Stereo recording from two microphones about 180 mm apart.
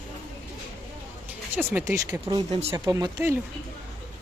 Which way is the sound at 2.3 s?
35° right (ahead or behind).